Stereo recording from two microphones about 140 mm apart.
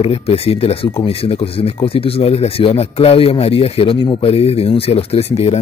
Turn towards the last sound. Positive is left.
turn(degrees=50)  # may be behind; listen again after turning